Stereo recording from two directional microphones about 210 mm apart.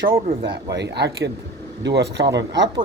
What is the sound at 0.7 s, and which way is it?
Speech, 55° right (ahead or behind).